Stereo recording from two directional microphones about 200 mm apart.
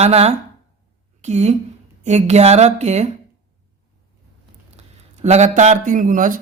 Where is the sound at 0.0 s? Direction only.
30° right (ahead or behind).